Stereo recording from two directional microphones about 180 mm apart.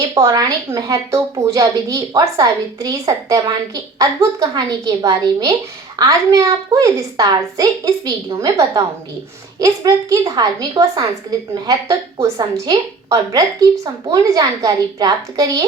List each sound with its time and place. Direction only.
0.0 s a woman's voice: 20° right (ahead or behind)